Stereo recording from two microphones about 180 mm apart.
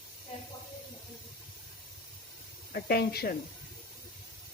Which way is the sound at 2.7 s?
60° left (ahead or behind).